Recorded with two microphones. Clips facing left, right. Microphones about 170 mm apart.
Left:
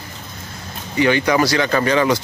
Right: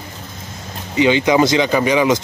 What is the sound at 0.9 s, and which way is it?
Speech, 20° right (ahead or behind).